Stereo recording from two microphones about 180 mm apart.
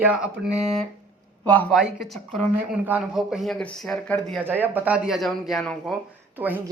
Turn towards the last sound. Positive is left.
turn(degrees=-10)  # may be behind; listen again after turning